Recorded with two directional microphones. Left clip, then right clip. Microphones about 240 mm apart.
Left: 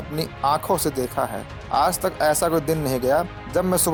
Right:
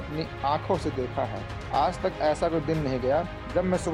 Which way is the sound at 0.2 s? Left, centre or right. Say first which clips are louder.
Left 6 dB; left.